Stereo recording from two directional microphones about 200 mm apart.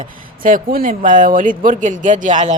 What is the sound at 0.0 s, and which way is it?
Speech, 40° right (ahead or behind).